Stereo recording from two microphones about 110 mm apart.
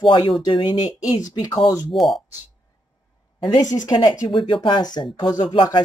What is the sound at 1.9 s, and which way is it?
Speech, centre (ahead or behind).